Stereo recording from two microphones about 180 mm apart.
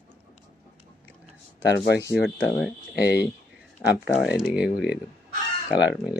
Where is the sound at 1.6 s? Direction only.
70° left (ahead or behind).